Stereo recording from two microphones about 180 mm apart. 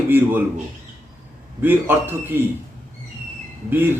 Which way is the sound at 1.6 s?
10° right (ahead or behind).